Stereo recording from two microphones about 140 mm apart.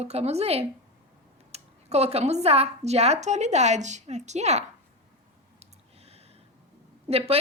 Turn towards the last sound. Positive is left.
turn(degrees=-45)  # may be behind; listen again after turning